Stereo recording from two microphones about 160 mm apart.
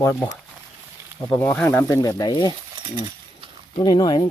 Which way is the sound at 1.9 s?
25° left (ahead or behind).